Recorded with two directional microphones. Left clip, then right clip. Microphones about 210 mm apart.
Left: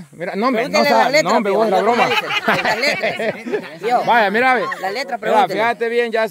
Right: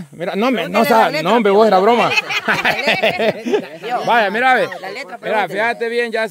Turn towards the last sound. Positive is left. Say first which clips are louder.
# left 1 dB
turn(degrees=0)  # may be behind; listen again after turning